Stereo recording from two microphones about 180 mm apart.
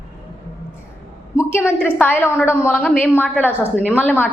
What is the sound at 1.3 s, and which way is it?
A woman's voice, 15° left (ahead or behind).